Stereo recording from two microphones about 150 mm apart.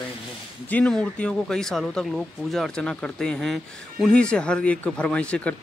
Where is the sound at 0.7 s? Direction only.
5° left (ahead or behind).